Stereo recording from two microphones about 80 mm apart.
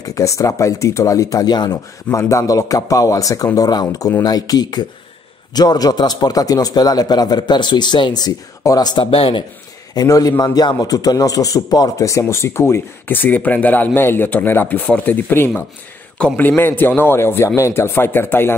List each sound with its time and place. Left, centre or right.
0.0 s a man's voice: left
2.1 s a man's voice: left
9.9 s a man's voice: left
13.2 s speech: left